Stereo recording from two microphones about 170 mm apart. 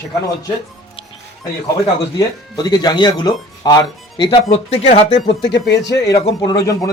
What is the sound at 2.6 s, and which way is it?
Speech, 25° left (ahead or behind).